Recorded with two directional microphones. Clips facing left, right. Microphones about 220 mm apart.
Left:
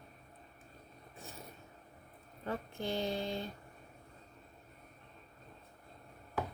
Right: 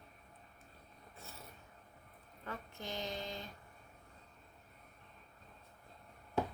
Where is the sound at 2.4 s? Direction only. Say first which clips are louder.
Left 7 dB; 30° left (ahead or behind).